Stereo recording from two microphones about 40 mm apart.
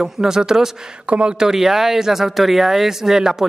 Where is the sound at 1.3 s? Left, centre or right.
Centre.